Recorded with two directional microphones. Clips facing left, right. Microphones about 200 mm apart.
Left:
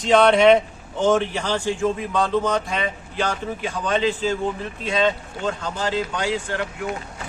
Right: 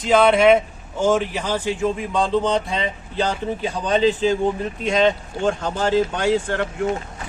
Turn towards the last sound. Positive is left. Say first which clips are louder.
# right 5 dB
turn(degrees=-40)  # may be behind; listen again after turning